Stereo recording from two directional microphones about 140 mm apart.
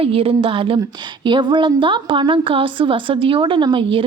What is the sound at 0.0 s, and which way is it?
A woman's voice, 45° right (ahead or behind).